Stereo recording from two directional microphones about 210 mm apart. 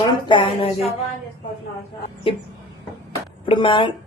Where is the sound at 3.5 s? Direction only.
25° left (ahead or behind).